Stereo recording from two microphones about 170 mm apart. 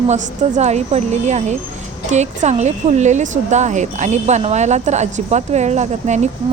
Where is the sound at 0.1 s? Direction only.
40° right (ahead or behind).